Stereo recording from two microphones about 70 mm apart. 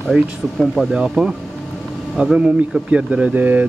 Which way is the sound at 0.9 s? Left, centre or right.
Centre.